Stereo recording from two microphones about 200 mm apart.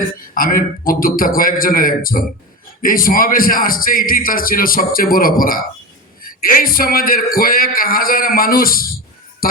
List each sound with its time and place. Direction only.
0.3 s a man's voice: 45° left (ahead or behind)
9.4 s music: 45° left (ahead or behind)